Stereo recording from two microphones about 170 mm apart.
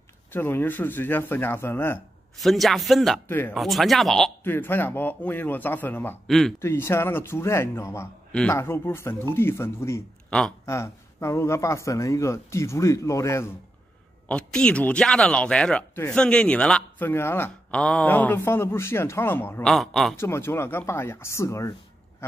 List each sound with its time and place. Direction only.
0.3 s speech: 10° left (ahead or behind)
2.3 s a man's voice: centre (ahead or behind)
3.3 s speech: 10° left (ahead or behind)
3.5 s a man's voice: centre (ahead or behind)
4.5 s a man's voice: 10° left (ahead or behind)
6.6 s speech: 15° left (ahead or behind)
14.2 s a man's voice: 5° left (ahead or behind)
19.6 s a man's voice: centre (ahead or behind)
20.2 s speech: 15° left (ahead or behind)